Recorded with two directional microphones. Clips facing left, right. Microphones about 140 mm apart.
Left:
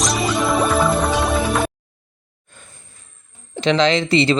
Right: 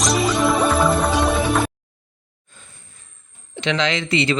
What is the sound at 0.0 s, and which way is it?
Music, centre (ahead or behind).